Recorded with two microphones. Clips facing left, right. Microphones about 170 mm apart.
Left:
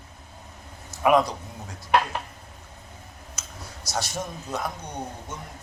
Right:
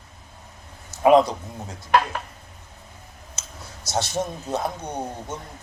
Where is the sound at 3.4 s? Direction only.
25° right (ahead or behind).